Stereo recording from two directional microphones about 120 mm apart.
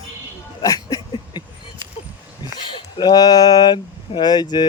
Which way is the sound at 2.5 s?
40° left (ahead or behind).